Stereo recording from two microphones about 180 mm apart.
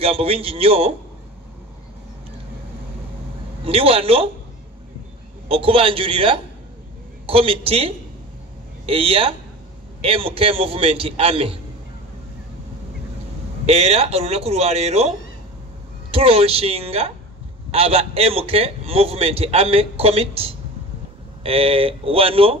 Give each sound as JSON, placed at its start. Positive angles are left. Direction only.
{"t": 0.0, "sound": "a man's voice", "side_deg": -30}
{"t": 3.6, "sound": "a man's voice", "side_deg": -30}
{"t": 5.5, "sound": "a man's voice", "side_deg": -30}
{"t": 13.7, "sound": "a man's voice", "side_deg": -35}